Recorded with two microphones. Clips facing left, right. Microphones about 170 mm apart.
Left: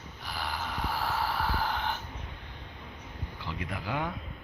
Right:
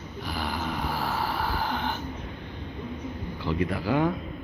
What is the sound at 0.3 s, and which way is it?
Gasp, 20° right (ahead or behind).